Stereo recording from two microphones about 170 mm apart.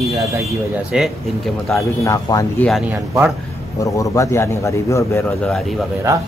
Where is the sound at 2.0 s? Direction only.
20° left (ahead or behind).